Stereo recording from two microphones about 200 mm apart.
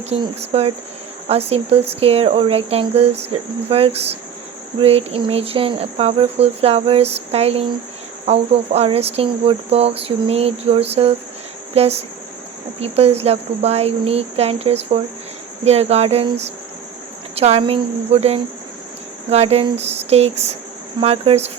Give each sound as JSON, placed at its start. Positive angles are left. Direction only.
{"t": 0.1, "sound": "speech", "side_deg": -30}